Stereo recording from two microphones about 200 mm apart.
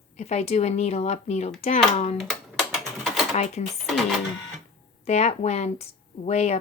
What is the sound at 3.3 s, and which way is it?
Speech, 35° left (ahead or behind).